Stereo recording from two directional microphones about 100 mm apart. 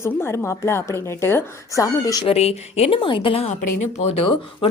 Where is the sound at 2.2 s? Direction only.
90° left; by 3.5 s 65° left (ahead or behind).